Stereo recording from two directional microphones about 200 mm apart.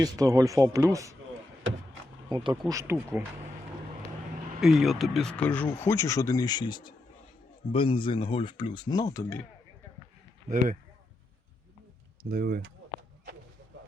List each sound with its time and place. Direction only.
0.0 s speech: 20° right (ahead or behind)
2.3 s speech: 20° right (ahead or behind)
4.6 s speech: centre (ahead or behind); by 9.4 s 15° left (ahead or behind)
12.3 s speech: 50° right (ahead or behind)